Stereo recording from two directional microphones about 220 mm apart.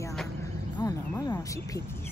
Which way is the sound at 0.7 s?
20° left (ahead or behind).